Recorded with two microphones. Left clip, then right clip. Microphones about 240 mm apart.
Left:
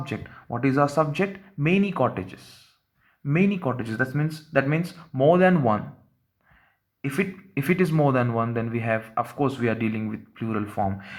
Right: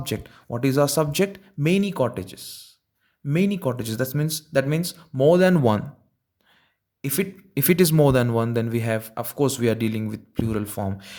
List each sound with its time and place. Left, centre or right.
0.3 s speech: right
1.1 s speech: right
7.1 s speech: right
9.4 s speech: right